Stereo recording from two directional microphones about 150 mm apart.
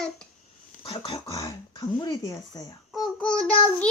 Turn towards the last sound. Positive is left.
turn(degrees=5)  # may be behind; listen again after turning